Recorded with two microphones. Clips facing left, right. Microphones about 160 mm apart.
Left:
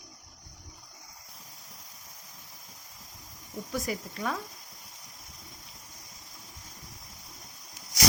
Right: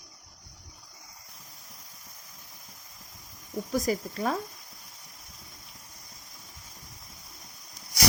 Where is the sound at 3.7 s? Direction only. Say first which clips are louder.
Right 5 dB; 40° right (ahead or behind).